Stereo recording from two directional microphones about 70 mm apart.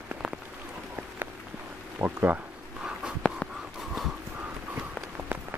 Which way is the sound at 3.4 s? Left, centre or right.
Centre.